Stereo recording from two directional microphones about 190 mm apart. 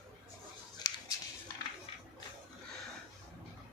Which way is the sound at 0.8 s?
20° left (ahead or behind).